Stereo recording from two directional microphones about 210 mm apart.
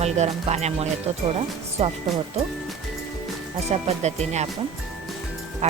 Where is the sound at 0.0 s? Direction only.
30° right (ahead or behind).